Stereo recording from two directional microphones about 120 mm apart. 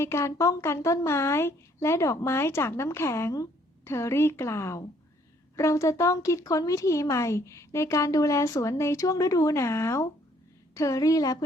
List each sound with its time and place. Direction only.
0.0 s speech: 20° left (ahead or behind)